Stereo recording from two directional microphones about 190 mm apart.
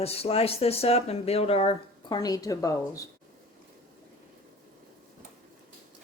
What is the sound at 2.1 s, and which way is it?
Speech, 20° left (ahead or behind).